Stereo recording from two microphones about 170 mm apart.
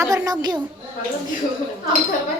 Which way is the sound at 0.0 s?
20° right (ahead or behind).